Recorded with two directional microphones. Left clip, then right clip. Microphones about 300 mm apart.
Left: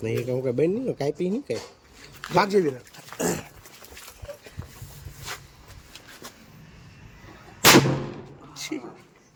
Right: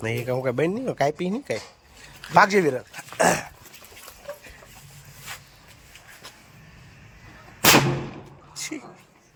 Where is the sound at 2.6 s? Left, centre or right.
Right.